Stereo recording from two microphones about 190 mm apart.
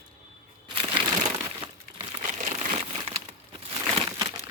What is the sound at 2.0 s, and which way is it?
Crumpling, 35° right (ahead or behind).